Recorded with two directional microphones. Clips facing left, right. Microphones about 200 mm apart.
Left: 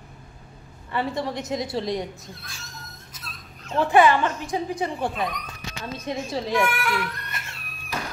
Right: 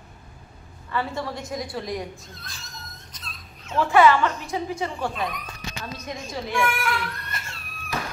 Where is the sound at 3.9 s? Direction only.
15° left (ahead or behind).